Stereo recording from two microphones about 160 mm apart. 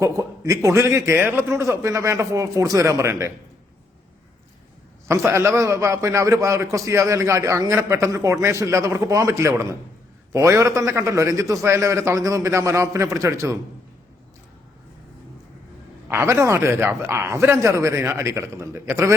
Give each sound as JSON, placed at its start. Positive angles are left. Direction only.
{"t": 0.0, "sound": "a man's voice", "side_deg": -20}
{"t": 5.0, "sound": "a man's voice", "side_deg": -15}
{"t": 16.0, "sound": "a man's voice", "side_deg": -15}